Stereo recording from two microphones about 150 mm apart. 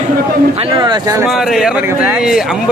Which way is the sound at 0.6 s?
30° right (ahead or behind).